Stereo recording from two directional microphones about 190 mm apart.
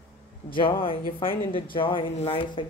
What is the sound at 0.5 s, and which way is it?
A woman's voice, 25° left (ahead or behind).